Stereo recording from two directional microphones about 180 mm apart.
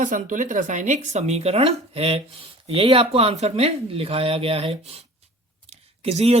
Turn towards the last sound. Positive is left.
turn(degrees=-35)  # may be behind; listen again after turning